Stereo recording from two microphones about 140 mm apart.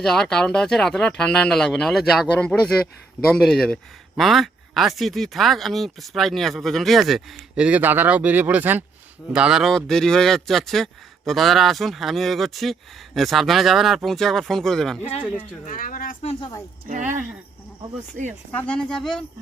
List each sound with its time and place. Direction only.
0.0 s speech: 5° left (ahead or behind)
15.6 s speech: 70° left (ahead or behind)
16.9 s speech: 65° right (ahead or behind)
18.5 s speech: 10° left (ahead or behind)